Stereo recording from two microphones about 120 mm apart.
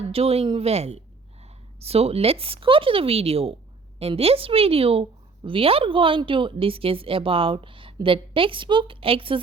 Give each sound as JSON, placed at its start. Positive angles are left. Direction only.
{"t": 0.1, "sound": "a woman's voice", "side_deg": -55}